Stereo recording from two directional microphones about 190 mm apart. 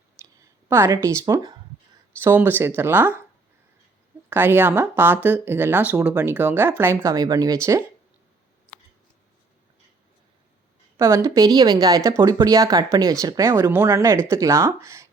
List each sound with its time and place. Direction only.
0.2 s speech: 15° right (ahead or behind)
4.3 s speech: 10° right (ahead or behind)
10.9 s speech: 15° right (ahead or behind)